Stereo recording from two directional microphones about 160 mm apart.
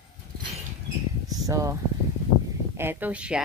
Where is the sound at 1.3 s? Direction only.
20° right (ahead or behind).